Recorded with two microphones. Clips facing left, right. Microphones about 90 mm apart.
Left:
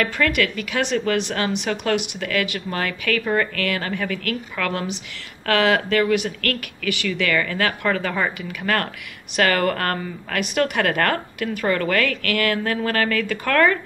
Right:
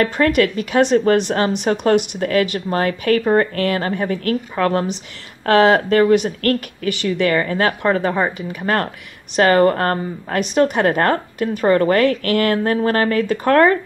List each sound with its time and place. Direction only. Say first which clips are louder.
0.0 s a woman's voice: right 5 dB; 35° right (ahead or behind)